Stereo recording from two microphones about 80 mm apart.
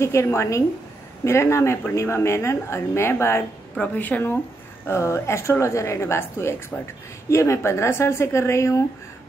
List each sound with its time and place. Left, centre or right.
0.0 s a woman's voice: left
3.7 s a woman's voice: centre
4.8 s a woman's voice: left
6.7 s a woman's voice: centre
7.2 s a woman's voice: left